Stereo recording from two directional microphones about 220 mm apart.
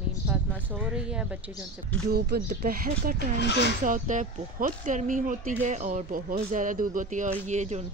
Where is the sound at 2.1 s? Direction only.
40° right (ahead or behind).